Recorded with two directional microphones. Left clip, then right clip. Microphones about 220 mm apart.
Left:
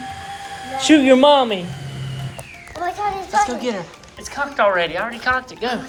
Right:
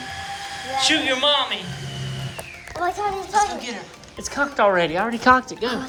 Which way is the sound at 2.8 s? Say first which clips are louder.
Left 1 dB; 35° right (ahead or behind).